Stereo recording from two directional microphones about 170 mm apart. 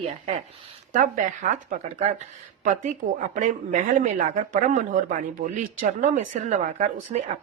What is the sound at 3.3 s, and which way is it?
Speech, 45° right (ahead or behind).